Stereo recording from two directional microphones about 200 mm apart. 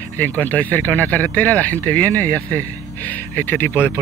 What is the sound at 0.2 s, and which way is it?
Speech, 10° left (ahead or behind).